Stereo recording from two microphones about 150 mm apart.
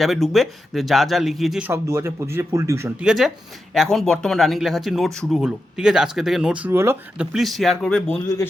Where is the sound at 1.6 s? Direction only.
15° right (ahead or behind).